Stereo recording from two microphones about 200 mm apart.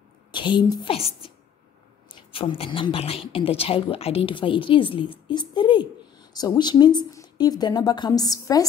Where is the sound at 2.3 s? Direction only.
25° left (ahead or behind).